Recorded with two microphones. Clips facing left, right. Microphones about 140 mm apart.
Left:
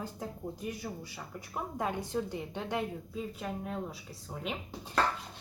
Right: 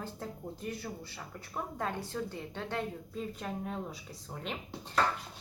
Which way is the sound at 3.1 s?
5° left (ahead or behind).